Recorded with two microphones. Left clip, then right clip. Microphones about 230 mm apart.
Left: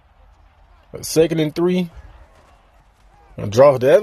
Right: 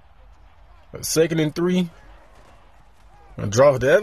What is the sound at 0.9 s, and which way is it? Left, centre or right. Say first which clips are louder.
Speech: left 3 dB; centre.